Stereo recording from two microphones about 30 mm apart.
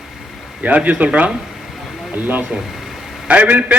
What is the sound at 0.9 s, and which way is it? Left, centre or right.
Speech, right.